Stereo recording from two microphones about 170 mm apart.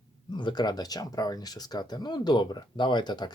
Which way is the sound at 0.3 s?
25° left (ahead or behind).